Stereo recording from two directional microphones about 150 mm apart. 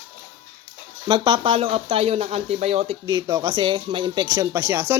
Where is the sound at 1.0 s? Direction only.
30° right (ahead or behind).